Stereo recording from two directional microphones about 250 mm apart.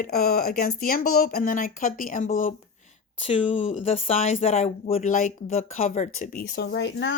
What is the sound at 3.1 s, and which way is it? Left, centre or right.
Speech, left.